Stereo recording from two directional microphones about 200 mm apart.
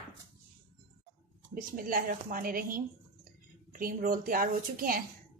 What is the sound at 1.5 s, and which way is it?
Speech, 45° right (ahead or behind).